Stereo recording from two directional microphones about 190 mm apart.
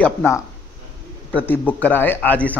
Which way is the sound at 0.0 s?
10° left (ahead or behind).